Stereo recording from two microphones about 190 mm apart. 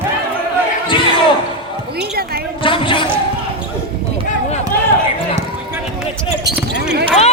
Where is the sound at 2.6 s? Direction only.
25° left (ahead or behind).